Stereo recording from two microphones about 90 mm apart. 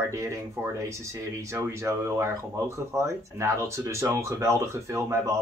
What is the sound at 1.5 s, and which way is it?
Speech, 30° right (ahead or behind).